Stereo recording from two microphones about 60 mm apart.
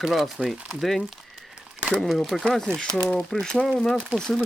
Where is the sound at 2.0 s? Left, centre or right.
Centre.